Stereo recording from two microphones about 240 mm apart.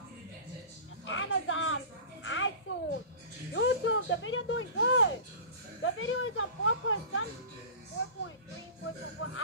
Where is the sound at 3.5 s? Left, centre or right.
Left.